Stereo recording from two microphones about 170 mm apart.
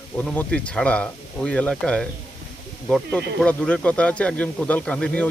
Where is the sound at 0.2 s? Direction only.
5° left (ahead or behind).